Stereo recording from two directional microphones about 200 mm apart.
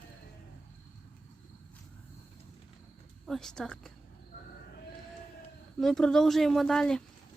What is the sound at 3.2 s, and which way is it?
Speech, centre (ahead or behind).